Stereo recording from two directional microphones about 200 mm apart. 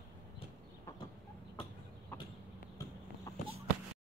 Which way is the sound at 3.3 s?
15° left (ahead or behind).